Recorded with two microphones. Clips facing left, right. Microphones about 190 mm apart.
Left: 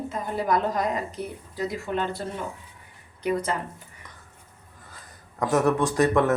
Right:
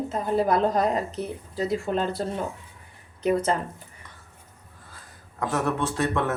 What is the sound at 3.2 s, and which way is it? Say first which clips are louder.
Speech: right 3 dB; 25° right (ahead or behind).